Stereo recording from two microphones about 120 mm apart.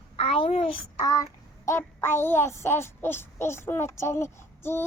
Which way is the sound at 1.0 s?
30° left (ahead or behind).